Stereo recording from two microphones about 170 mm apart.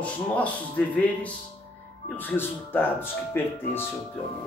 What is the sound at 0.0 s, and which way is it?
Speech, 5° left (ahead or behind).